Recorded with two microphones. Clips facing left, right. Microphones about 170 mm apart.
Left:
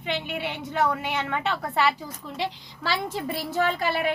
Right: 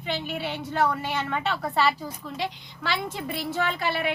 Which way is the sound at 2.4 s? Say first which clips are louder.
Left 2 dB; 35° left (ahead or behind).